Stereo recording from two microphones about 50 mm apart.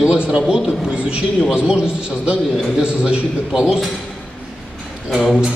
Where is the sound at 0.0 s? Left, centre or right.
Centre.